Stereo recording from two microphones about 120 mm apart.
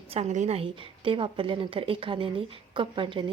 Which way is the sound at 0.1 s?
70° right (ahead or behind).